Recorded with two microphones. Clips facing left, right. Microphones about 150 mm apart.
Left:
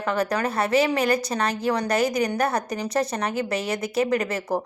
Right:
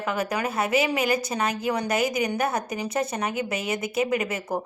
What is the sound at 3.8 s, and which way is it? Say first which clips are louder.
Speech: left 2 dB; 35° left (ahead or behind).